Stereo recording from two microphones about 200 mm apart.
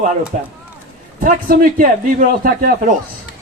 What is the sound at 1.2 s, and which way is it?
A man's voice, 45° right (ahead or behind).